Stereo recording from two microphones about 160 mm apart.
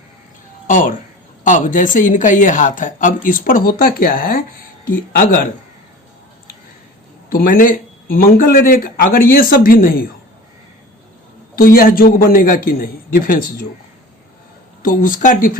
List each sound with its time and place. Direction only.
0.7 s speech: 55° left (ahead or behind)
7.3 s speech: 60° left (ahead or behind)
11.5 s speech: 65° left (ahead or behind)
14.8 s speech: 60° left (ahead or behind)